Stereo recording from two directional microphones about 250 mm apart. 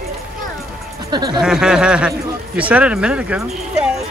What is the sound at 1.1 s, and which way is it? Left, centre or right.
Music, centre.